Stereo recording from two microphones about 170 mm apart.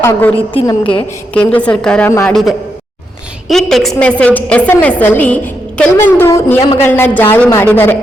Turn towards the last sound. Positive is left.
turn(degrees=10)  # may be behind; listen again after turning